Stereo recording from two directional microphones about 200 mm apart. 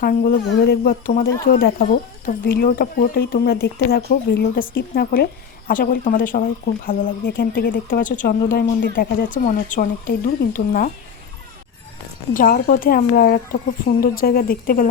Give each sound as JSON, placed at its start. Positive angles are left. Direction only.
{"t": 0.0, "sound": "speech", "side_deg": 45}
{"t": 12.3, "sound": "speech", "side_deg": 45}